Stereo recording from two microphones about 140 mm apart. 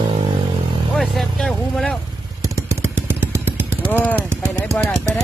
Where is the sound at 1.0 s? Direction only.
Centre (ahead or behind).